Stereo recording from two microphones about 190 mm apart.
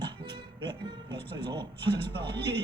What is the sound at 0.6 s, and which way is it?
A man's voice, 25° right (ahead or behind).